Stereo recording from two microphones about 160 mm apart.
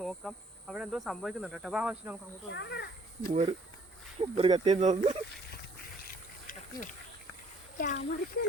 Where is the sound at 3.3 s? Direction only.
45° right (ahead or behind).